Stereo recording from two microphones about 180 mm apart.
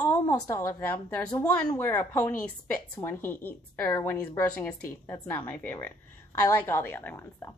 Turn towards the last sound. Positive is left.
turn(degrees=10)  # may be behind; listen again after turning